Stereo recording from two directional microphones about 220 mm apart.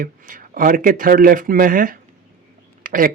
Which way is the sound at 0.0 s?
40° right (ahead or behind).